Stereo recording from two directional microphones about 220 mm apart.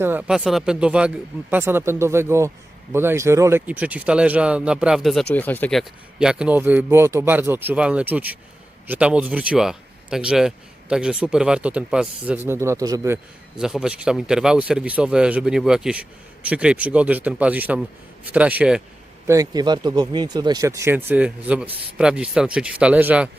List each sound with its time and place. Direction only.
0.0 s speech: 10° right (ahead or behind); by 5.8 s 5° left (ahead or behind)
6.1 s speech: 5° right (ahead or behind)
13.6 s speech: 5° right (ahead or behind)
19.3 s speech: 15° right (ahead or behind)